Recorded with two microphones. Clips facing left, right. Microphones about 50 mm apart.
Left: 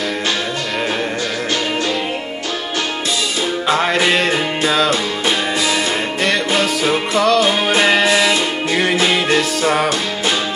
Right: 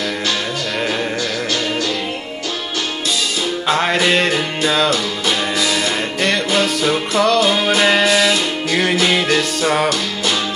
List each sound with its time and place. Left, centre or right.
3.6 s music: centre
6.8 s music: centre
9.6 s music: centre